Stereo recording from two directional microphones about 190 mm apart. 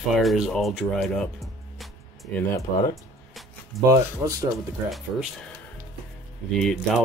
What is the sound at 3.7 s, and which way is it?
Speech, centre (ahead or behind).